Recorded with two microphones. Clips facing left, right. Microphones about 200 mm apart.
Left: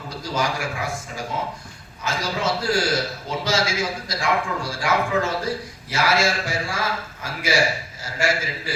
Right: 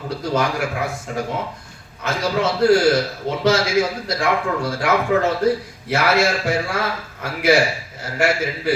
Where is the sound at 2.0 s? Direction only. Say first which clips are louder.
Right 4 dB; 65° right (ahead or behind).